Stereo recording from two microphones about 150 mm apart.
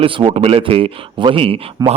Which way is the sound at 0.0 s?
35° right (ahead or behind).